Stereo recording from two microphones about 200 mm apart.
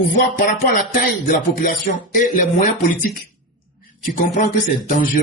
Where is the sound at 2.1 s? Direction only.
40° left (ahead or behind).